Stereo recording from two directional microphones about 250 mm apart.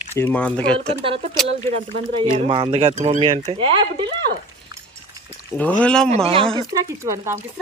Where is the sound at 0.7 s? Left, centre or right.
Right.